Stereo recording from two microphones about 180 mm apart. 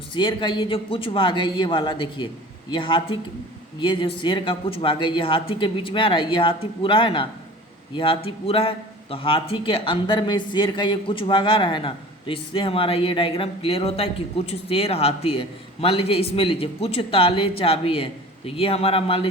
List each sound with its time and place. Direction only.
0.1 s a man's voice: 25° left (ahead or behind)